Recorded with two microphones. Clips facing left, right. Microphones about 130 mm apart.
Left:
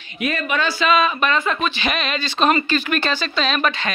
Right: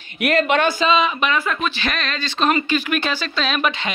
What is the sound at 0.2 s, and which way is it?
Speech, 80° right.